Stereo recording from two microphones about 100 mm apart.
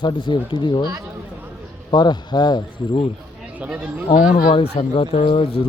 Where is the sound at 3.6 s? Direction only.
15° right (ahead or behind).